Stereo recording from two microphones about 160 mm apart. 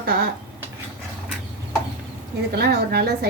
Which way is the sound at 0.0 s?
70° right (ahead or behind).